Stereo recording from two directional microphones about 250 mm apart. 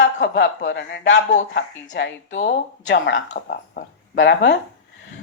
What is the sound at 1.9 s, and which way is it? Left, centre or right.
A woman's voice, left.